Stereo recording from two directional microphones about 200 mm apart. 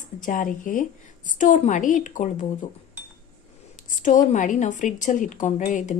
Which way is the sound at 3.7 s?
40° left (ahead or behind).